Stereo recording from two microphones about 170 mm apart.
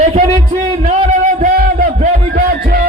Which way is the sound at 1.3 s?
55° right (ahead or behind).